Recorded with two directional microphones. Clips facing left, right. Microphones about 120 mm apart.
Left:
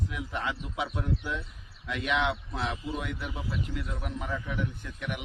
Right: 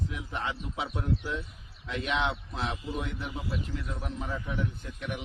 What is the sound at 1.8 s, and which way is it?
A man's voice, 30° right (ahead or behind).